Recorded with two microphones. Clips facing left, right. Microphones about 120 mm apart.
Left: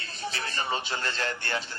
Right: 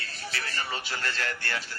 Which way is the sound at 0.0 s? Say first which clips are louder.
Left 2 dB; 20° left (ahead or behind).